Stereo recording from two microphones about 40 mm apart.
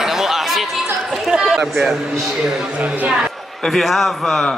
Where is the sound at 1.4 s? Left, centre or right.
Centre.